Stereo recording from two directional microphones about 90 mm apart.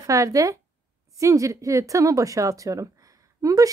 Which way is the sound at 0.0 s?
40° right (ahead or behind).